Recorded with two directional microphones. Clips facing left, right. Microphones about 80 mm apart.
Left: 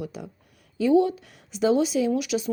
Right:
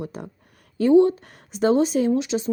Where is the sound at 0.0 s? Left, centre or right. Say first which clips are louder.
Right 2 dB; right.